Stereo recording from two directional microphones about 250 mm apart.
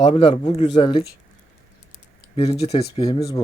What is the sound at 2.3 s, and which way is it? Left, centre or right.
Speech, left.